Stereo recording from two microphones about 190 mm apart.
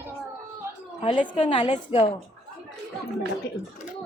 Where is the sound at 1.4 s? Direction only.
25° left (ahead or behind).